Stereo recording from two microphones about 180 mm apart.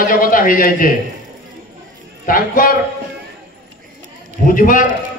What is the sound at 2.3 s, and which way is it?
Speech, 50° left (ahead or behind).